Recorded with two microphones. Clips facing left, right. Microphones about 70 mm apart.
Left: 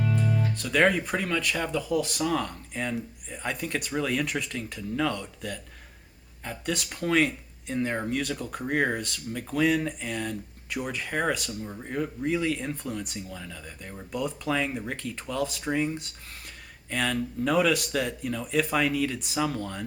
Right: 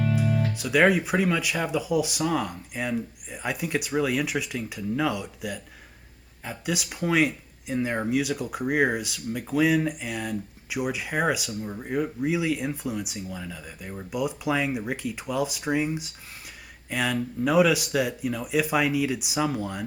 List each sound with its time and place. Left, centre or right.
0.3 s guitar: right
0.5 s speech: centre